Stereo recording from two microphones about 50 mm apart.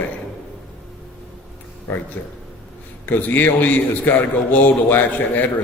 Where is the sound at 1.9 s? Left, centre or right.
Left.